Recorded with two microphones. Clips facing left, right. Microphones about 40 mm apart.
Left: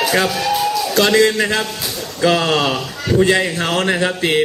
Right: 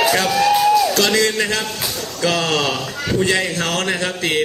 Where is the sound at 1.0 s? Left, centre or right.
Centre.